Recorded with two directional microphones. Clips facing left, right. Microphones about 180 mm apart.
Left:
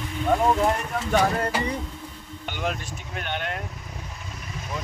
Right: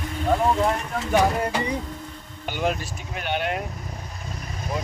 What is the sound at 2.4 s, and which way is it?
Vehicle, 5° right (ahead or behind).